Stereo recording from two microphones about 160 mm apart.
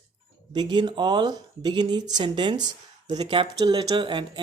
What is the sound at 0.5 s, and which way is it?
Speech, 25° right (ahead or behind).